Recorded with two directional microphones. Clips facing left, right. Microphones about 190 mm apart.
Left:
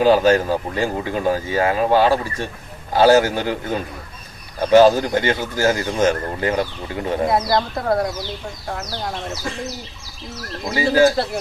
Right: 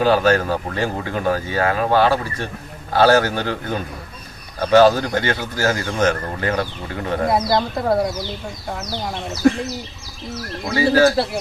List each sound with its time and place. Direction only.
0.0 s speech: 15° left (ahead or behind)
7.3 s speech: centre (ahead or behind)
10.7 s speech: 15° left (ahead or behind)